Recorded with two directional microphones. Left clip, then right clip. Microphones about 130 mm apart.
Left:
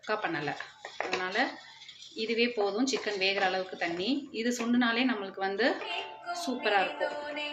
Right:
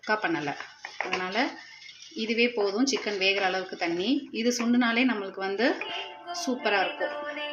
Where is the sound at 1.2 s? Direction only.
45° right (ahead or behind).